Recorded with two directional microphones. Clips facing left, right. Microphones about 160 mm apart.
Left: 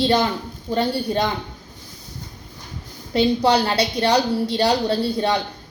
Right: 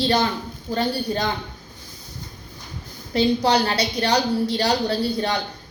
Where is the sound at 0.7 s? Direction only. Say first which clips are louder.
Left 2 dB; 25° left (ahead or behind).